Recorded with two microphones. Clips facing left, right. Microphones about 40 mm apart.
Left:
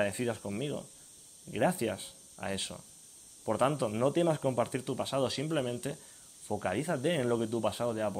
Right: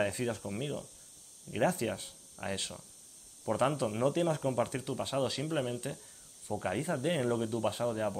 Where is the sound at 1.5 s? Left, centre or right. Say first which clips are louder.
Left 1 dB; centre.